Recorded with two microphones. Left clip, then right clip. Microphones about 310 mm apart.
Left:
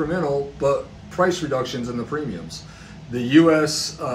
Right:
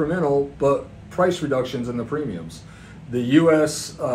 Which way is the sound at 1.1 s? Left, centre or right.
Right.